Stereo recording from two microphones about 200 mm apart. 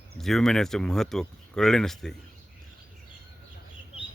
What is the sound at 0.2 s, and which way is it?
Speech, centre (ahead or behind).